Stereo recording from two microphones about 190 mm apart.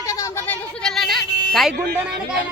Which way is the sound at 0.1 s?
15° left (ahead or behind).